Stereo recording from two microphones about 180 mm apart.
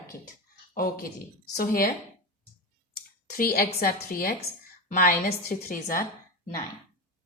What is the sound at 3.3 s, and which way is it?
A woman's voice, 55° left (ahead or behind).